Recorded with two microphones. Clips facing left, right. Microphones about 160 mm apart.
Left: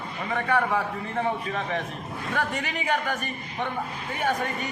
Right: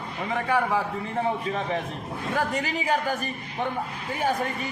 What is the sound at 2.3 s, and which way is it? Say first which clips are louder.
Speech: right 2 dB; 35° right (ahead or behind).